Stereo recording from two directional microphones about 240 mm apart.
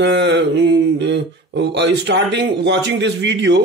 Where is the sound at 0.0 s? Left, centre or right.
Right.